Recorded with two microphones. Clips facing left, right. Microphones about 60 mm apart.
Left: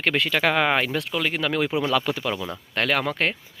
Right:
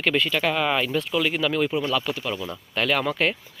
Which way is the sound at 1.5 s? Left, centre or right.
Left.